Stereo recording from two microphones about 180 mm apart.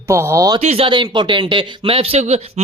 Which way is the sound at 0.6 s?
35° right (ahead or behind).